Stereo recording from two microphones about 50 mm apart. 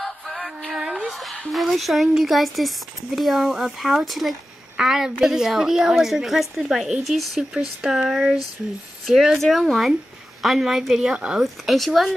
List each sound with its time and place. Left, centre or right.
0.0 s music: centre
1.5 s speech: centre
11.1 s speech: centre
11.4 s speech: centre